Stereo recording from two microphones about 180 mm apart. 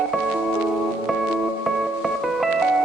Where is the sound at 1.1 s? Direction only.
Centre (ahead or behind).